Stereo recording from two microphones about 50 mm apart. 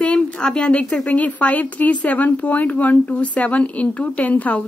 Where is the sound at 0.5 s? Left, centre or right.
Left.